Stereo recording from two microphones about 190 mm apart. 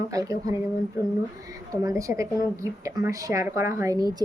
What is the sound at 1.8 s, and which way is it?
Speech, 15° right (ahead or behind).